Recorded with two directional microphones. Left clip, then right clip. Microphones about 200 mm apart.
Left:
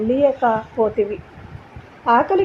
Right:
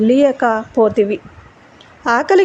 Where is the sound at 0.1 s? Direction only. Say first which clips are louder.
Right 2 dB; 30° right (ahead or behind).